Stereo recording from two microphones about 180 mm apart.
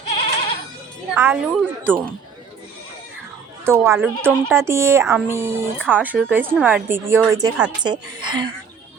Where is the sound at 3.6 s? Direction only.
15° right (ahead or behind).